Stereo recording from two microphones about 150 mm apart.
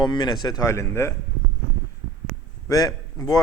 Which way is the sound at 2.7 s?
25° left (ahead or behind).